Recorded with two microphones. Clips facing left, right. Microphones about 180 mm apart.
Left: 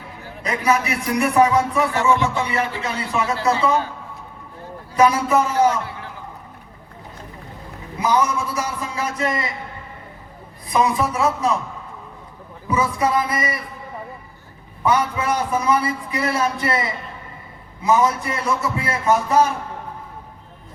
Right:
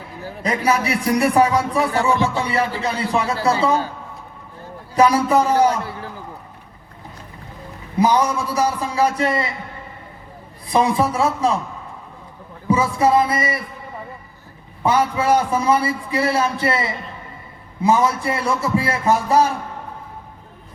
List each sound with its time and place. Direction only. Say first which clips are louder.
0.3 s a man's voice: right 1 dB; 35° right (ahead or behind)
4.9 s a man's voice: right 1 dB; 35° right (ahead or behind)
7.9 s a man's voice: right 3 dB; 35° right (ahead or behind)
10.7 s a man's voice: right 2 dB; 30° right (ahead or behind)
12.6 s a man's voice: right 3 dB; 30° right (ahead or behind)
14.8 s a man's voice: right 3 dB; 30° right (ahead or behind)
17.8 s a man's voice: right 1 dB; 30° right (ahead or behind)